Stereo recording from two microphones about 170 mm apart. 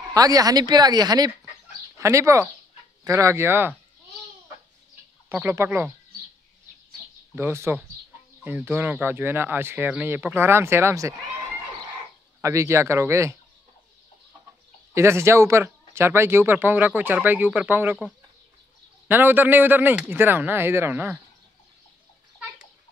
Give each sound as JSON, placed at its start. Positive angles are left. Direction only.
{"t": 0.1, "sound": "speech", "side_deg": -20}
{"t": 5.3, "sound": "speech", "side_deg": -15}
{"t": 7.3, "sound": "speech", "side_deg": -15}
{"t": 12.4, "sound": "speech", "side_deg": -15}
{"t": 15.0, "sound": "speech", "side_deg": -15}
{"t": 19.0, "sound": "speech", "side_deg": -10}